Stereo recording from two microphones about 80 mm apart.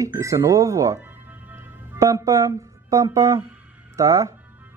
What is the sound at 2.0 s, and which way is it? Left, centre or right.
Speech, right.